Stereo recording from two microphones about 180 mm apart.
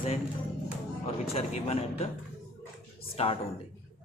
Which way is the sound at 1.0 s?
35° left (ahead or behind).